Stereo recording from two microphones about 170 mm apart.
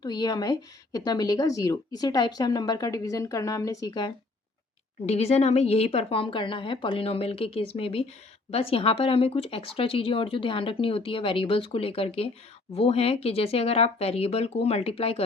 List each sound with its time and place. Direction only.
0.0 s speech: 25° left (ahead or behind)
5.0 s speech: 40° left (ahead or behind)